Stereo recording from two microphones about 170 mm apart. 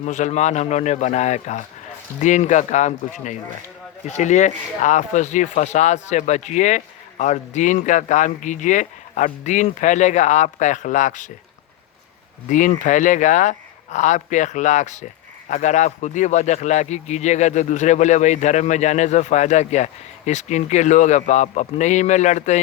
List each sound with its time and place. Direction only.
0.0 s speech: 45° left (ahead or behind)
12.5 s speech: 50° left (ahead or behind)